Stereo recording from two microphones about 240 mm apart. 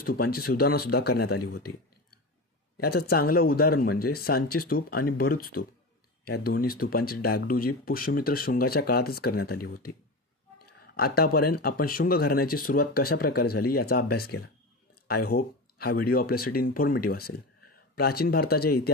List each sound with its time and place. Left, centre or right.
0.0 s speech: left
11.0 s speech: left